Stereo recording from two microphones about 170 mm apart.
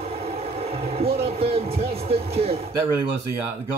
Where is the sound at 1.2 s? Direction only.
35° right (ahead or behind).